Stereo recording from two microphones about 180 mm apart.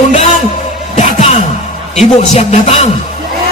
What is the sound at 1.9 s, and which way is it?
Speech, 35° left (ahead or behind).